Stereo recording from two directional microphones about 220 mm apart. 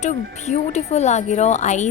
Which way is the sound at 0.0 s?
30° left (ahead or behind).